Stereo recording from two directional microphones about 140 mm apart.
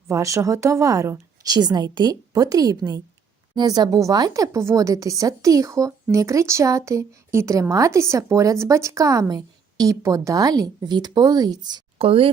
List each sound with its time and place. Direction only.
0.1 s a woman's voice: 20° right (ahead or behind)
11.9 s speech: 40° right (ahead or behind)